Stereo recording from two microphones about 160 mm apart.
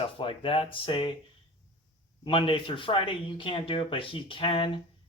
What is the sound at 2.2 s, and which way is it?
Speech, 30° left (ahead or behind).